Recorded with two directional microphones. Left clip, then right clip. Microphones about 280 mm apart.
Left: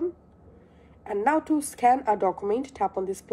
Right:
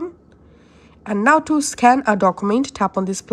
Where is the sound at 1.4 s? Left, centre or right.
Right.